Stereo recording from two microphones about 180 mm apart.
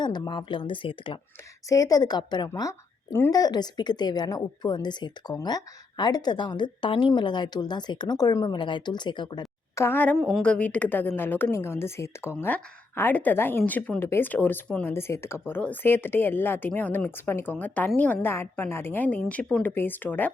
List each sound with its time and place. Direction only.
0.0 s a woman's voice: 25° left (ahead or behind)